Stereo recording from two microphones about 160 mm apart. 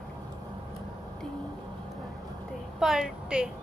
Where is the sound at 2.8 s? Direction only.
5° right (ahead or behind).